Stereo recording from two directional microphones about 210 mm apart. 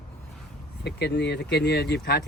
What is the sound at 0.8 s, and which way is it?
Speech, 50° left (ahead or behind).